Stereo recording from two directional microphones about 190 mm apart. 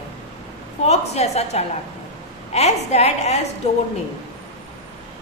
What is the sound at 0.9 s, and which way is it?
A woman's voice, 35° left (ahead or behind).